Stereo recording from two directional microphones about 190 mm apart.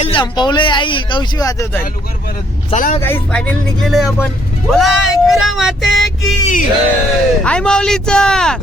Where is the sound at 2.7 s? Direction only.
40° left (ahead or behind).